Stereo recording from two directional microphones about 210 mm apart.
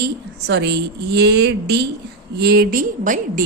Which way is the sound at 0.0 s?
55° right (ahead or behind).